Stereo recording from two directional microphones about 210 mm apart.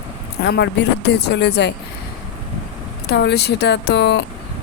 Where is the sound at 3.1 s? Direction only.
50° left (ahead or behind).